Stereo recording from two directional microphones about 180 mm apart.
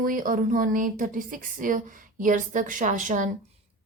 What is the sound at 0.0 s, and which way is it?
Speech, 50° right (ahead or behind).